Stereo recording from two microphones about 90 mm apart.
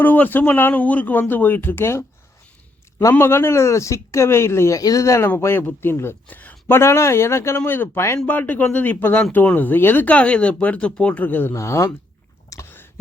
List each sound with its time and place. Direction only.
0.0 s speech: 20° left (ahead or behind)
4.8 s a man's voice: 40° left (ahead or behind); by 6.7 s 20° left (ahead or behind)
6.7 s speech: 30° left (ahead or behind)
8.3 s speech: 20° left (ahead or behind)
11.5 s speech: 35° left (ahead or behind)
12.5 s a sound: 40° left (ahead or behind)